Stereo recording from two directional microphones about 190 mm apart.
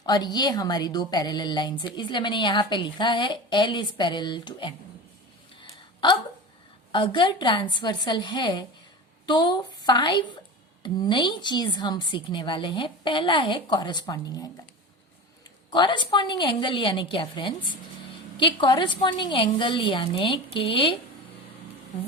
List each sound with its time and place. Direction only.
0.0 s a woman's voice: 20° left (ahead or behind)
5.5 s a sound: 25° left (ahead or behind)
6.9 s a woman's voice: 25° left (ahead or behind)
15.7 s a woman's voice: 25° left (ahead or behind)